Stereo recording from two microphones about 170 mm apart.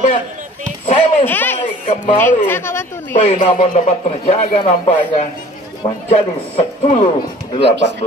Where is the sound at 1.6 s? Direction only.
45° left (ahead or behind).